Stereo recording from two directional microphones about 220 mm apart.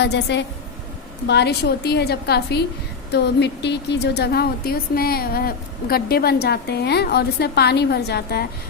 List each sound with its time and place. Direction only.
0.0 s a woman's voice: 50° left (ahead or behind)